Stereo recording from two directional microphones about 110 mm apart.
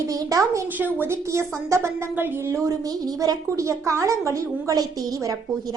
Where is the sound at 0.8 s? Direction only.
20° right (ahead or behind).